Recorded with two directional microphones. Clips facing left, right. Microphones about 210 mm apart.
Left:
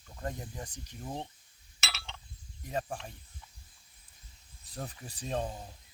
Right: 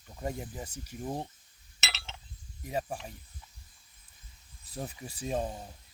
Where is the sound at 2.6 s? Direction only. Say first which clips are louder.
Right 1 dB; 5° right (ahead or behind).